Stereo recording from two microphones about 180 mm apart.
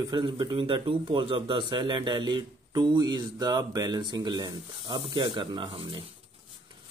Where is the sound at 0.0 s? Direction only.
25° right (ahead or behind).